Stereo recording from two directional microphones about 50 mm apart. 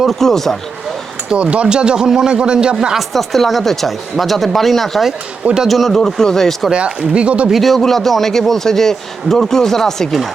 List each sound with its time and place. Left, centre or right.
0.0 s speech: centre
1.3 s a man's voice: right
3.1 s speech: centre
6.7 s speech: centre
7.4 s speech: centre